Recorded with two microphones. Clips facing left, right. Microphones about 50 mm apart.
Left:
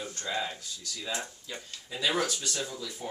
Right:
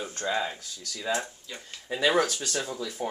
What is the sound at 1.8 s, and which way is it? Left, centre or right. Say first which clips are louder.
Speech: right 5 dB; right.